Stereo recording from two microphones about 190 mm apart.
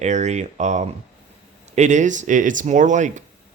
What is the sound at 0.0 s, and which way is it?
Speech, 35° right (ahead or behind).